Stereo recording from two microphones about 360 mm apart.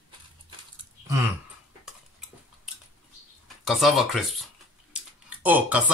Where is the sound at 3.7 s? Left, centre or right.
Centre.